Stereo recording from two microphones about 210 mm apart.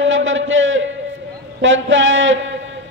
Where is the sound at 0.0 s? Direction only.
65° right (ahead or behind).